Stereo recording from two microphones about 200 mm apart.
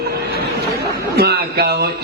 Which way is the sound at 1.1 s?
50° right (ahead or behind).